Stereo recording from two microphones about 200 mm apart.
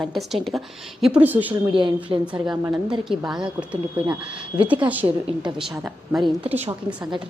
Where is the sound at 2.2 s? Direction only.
5° right (ahead or behind).